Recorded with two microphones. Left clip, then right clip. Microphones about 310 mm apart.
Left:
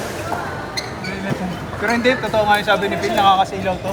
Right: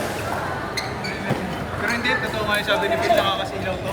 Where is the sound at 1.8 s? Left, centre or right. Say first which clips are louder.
Left 5 dB; centre.